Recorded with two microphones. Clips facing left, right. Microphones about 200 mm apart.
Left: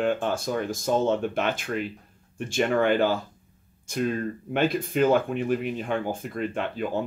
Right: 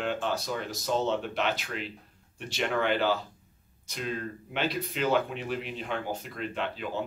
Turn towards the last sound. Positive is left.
turn(degrees=50)  # may be behind; listen again after turning